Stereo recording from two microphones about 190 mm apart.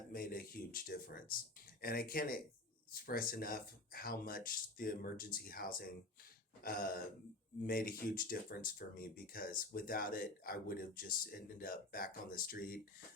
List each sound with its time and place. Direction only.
0.1 s speech: 50° left (ahead or behind)